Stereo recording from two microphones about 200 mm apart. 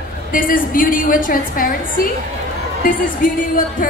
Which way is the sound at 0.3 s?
45° left (ahead or behind).